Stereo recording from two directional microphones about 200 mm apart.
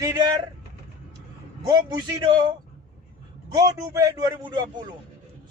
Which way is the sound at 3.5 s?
15° right (ahead or behind).